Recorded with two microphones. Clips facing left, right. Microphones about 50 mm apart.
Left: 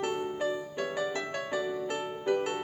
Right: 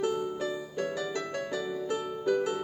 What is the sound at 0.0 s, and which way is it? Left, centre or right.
Music, left.